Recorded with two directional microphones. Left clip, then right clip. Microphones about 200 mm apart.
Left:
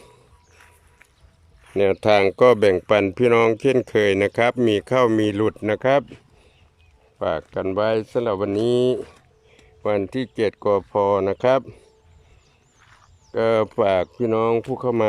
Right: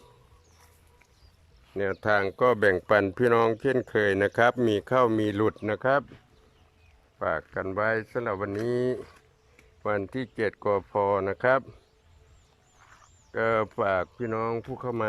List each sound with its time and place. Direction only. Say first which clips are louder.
1.7 s speech: left 9 dB; 20° left (ahead or behind)
7.2 s speech: left 5 dB; 15° left (ahead or behind)
13.3 s speech: left 7 dB; 15° left (ahead or behind)